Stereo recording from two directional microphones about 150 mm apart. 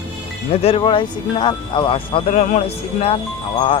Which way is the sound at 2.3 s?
45° left (ahead or behind).